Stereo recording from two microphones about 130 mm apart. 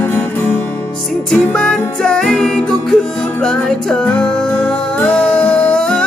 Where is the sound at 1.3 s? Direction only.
5° left (ahead or behind).